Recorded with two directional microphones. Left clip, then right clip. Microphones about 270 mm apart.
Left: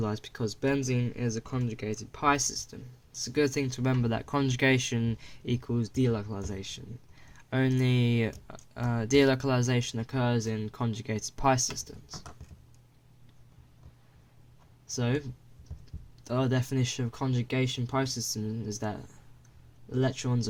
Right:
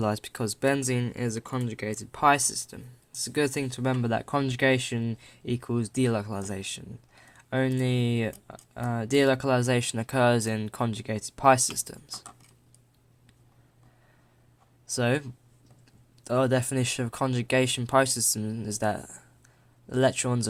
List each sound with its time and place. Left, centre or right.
0.0 s speech: right
14.9 s speech: right
16.2 s speech: centre